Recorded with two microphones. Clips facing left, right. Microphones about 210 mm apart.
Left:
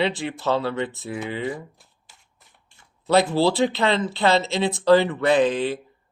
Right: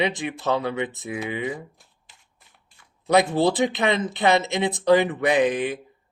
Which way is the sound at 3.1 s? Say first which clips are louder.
Even; 15° right (ahead or behind).